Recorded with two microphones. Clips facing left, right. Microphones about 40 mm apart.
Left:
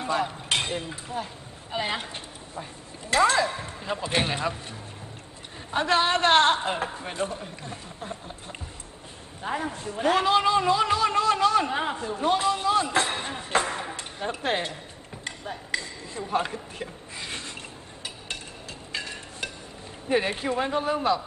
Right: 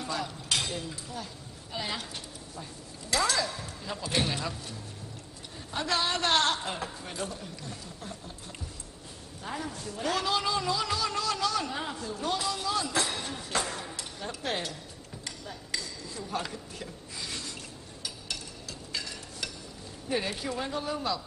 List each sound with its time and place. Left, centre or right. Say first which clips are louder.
0.0 s speech: left 7 dB; left
3.1 s a woman's voice: left 7 dB; left
5.7 s a woman's voice: left 7 dB; left
9.4 s a man's voice: left 7 dB; left
15.2 s a sound: left 7 dB; left
18.9 s a sound: left 4 dB; left
20.1 s a woman's voice: left 7 dB; left